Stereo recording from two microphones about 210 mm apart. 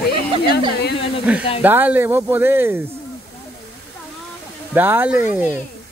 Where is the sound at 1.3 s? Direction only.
5° right (ahead or behind).